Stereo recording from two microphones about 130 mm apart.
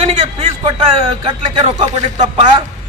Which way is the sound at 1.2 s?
45° right (ahead or behind).